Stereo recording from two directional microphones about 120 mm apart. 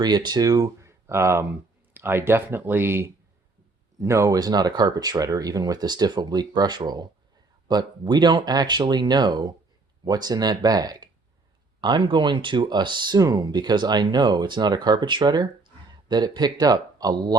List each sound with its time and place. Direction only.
0.0 s speech: 35° right (ahead or behind)